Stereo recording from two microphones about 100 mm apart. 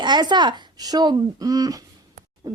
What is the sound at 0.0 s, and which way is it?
A woman's voice, 45° right (ahead or behind).